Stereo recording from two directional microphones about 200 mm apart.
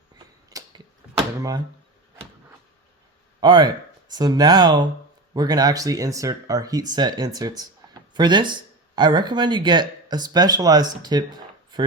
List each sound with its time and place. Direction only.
0.5 s a sound: 20° right (ahead or behind)
1.4 s speech: 20° right (ahead or behind)
3.4 s speech: 20° right (ahead or behind)